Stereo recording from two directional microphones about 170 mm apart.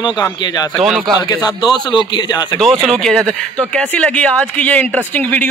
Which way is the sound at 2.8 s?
5° left (ahead or behind).